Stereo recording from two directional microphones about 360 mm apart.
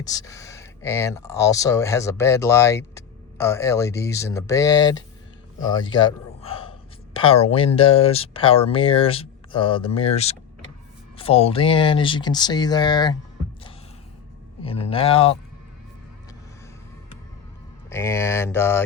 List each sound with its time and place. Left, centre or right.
0.0 s speech: centre
14.6 s speech: centre
17.8 s speech: centre